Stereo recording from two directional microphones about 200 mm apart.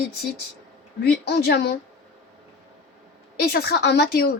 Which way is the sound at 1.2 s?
55° left (ahead or behind).